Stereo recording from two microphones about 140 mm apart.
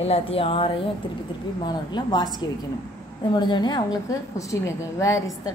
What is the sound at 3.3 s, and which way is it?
A woman's voice, 35° left (ahead or behind).